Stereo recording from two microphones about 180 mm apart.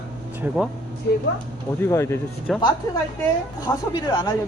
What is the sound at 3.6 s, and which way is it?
Speech, 20° left (ahead or behind).